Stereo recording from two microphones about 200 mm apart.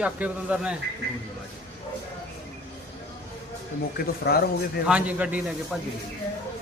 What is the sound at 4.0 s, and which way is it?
Speech, 50° left (ahead or behind).